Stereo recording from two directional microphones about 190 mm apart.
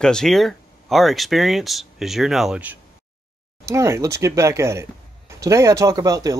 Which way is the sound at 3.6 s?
15° right (ahead or behind).